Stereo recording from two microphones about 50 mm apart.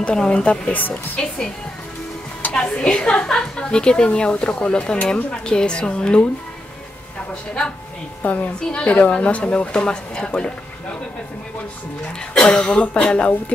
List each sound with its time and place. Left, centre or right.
0.0 s a woman's voice: centre
2.5 s a woman's voice: centre
8.2 s a woman's voice: left
8.5 s a woman's voice: centre
12.4 s speech: centre